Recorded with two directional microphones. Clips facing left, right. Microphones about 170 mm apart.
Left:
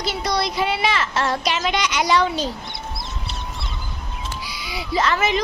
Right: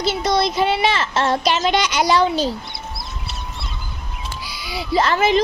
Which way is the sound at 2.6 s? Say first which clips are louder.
Even; 20° left (ahead or behind).